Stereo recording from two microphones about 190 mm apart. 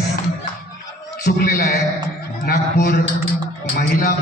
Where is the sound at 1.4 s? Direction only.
50° left (ahead or behind).